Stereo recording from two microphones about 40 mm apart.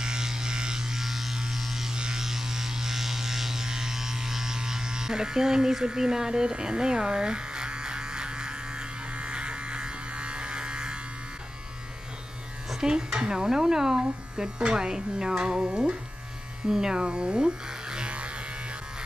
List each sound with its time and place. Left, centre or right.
0.0 s music: centre
1.4 s electric shaver: centre
12.8 s speech: right
16.6 s electric shaver: centre